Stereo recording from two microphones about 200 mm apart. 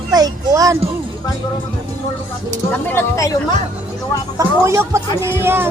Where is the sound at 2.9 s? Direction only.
15° left (ahead or behind).